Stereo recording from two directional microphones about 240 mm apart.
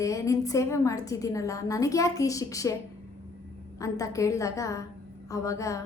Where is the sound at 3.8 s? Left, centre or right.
Centre.